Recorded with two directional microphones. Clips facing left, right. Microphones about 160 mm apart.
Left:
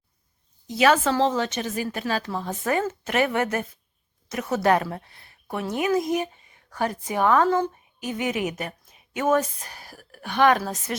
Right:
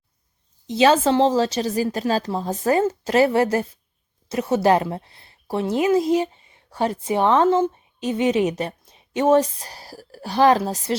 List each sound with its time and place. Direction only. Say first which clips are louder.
0.7 s a woman's voice: right 4 dB; 25° right (ahead or behind)